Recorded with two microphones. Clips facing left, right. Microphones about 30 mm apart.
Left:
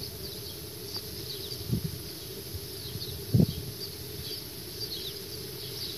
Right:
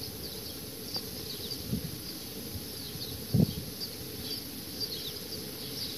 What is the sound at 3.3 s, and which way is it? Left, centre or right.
Bee, left.